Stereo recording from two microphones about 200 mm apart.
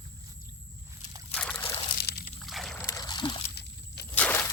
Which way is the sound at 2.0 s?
55° left (ahead or behind).